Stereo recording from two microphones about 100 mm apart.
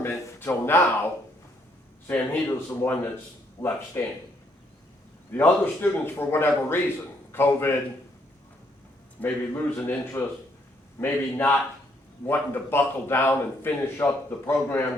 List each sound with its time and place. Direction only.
0.0 s a sound: 20° left (ahead or behind)
2.0 s a man's voice: 20° left (ahead or behind)
5.3 s a man's voice: 20° left (ahead or behind)
9.2 s a man's voice: 20° left (ahead or behind)